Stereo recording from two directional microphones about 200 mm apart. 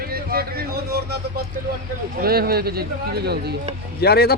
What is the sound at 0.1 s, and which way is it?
Speech, 50° right (ahead or behind).